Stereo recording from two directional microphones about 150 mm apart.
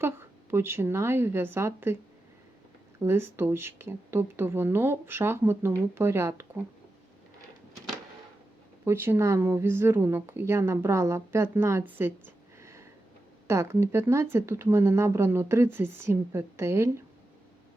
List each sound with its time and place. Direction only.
0.0 s speech: 15° right (ahead or behind)
3.0 s speech: 15° right (ahead or behind)
8.8 s speech: 15° right (ahead or behind)